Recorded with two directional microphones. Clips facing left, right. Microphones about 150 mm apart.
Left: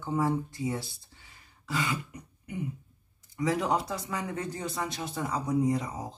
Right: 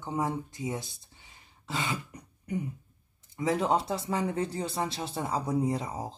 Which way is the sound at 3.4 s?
25° right (ahead or behind).